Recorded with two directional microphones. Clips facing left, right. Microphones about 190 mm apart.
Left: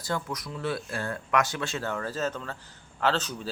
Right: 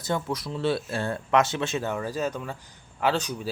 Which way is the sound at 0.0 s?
25° right (ahead or behind).